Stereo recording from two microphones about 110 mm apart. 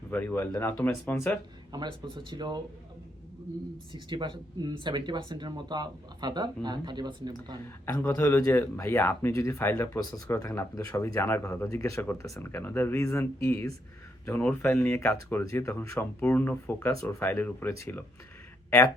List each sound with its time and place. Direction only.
0.1 s speech: 20° left (ahead or behind)
1.7 s speech: 45° right (ahead or behind)
3.9 s speech: 45° right (ahead or behind)
7.9 s speech: 30° left (ahead or behind)
14.4 s speech: 15° left (ahead or behind)
16.9 s speech: 30° left (ahead or behind)
17.2 s speech: 15° left (ahead or behind)